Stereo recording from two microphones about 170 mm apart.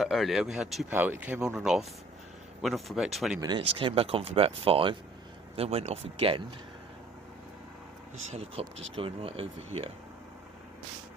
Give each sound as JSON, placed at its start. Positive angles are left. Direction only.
{"t": 0.0, "sound": "speech", "side_deg": 0}
{"t": 3.8, "sound": "speech", "side_deg": -30}
{"t": 8.3, "sound": "speech", "side_deg": -35}